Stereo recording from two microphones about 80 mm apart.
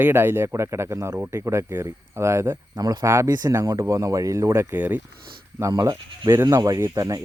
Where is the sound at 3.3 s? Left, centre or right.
Right.